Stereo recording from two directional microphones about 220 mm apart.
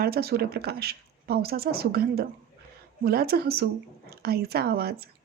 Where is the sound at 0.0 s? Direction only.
45° right (ahead or behind).